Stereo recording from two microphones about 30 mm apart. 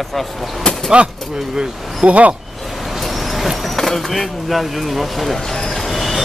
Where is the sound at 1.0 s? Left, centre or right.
Right.